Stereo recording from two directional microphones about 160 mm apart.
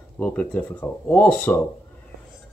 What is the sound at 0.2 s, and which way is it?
Speech, 10° left (ahead or behind).